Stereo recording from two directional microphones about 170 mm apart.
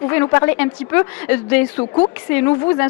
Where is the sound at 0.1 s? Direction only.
15° left (ahead or behind).